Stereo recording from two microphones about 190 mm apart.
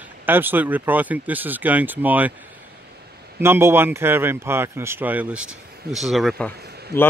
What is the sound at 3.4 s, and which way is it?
A man's voice, 15° right (ahead or behind).